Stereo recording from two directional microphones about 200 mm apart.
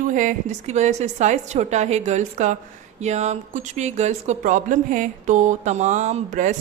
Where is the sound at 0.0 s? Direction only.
40° right (ahead or behind).